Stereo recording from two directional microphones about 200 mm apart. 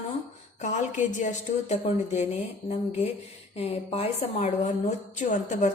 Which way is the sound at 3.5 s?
30° left (ahead or behind).